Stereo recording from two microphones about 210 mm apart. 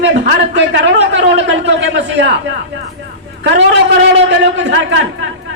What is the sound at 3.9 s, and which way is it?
A woman's voice, 55° right (ahead or behind).